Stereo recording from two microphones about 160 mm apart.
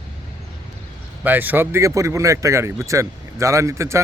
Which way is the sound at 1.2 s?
10° right (ahead or behind).